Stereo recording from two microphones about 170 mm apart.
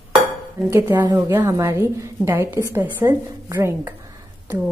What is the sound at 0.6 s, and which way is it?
A woman's voice, 10° right (ahead or behind).